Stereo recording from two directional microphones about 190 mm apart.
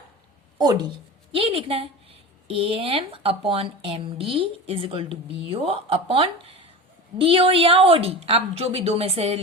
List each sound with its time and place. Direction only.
0.6 s a woman's voice: 20° right (ahead or behind)